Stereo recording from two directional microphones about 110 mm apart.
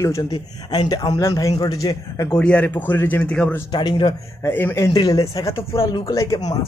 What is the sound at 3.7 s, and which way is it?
Speech, 45° left (ahead or behind).